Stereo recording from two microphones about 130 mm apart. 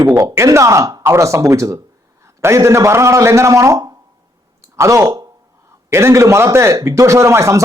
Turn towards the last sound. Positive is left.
turn(degrees=-20)  # may be behind; listen again after turning